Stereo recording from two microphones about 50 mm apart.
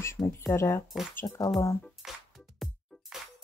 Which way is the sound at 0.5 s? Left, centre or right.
Left.